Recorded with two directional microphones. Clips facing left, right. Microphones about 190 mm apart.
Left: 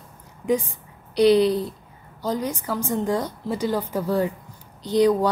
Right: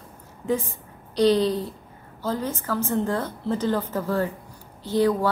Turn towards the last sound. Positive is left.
turn(degrees=15)  # may be behind; listen again after turning